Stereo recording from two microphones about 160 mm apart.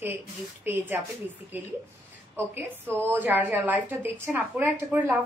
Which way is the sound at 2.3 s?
15° right (ahead or behind).